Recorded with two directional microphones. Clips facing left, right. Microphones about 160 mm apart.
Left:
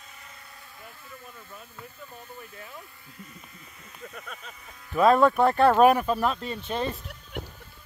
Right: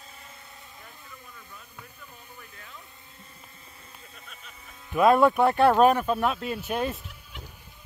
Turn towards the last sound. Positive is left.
turn(degrees=-15)  # may be behind; listen again after turning